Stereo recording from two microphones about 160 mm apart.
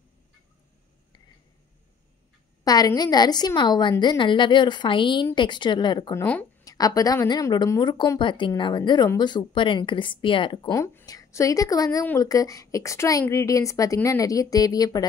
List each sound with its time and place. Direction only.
2.6 s a woman's voice: 25° left (ahead or behind)
10.7 s a woman's voice: 20° left (ahead or behind)